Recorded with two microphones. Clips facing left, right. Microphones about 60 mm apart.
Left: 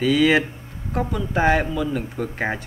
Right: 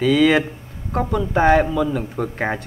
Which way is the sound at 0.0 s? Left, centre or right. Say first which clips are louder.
Right 2 dB; centre.